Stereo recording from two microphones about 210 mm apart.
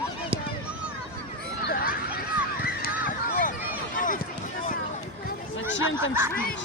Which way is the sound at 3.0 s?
40° left (ahead or behind).